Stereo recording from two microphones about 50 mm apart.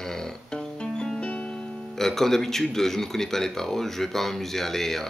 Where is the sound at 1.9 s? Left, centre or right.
Centre.